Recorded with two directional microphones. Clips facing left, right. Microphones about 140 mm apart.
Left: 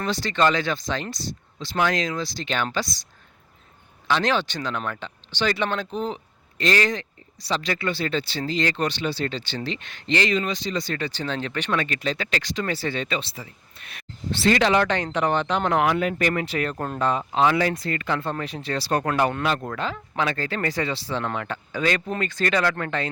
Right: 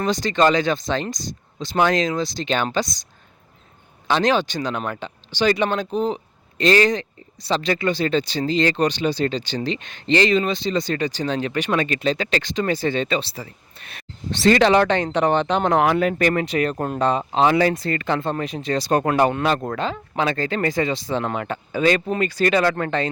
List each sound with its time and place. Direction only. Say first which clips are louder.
0.0 s speech: right 4 dB; 15° right (ahead or behind)
4.1 s speech: right 4 dB; 15° right (ahead or behind); by 16.5 s 35° right (ahead or behind)
16.5 s speech: right 5 dB; 20° right (ahead or behind)
18.9 s speech: right 4 dB; 30° right (ahead or behind)
19.1 s speech: right 4 dB; 20° right (ahead or behind)
19.5 s speech: right 4 dB; 30° right (ahead or behind)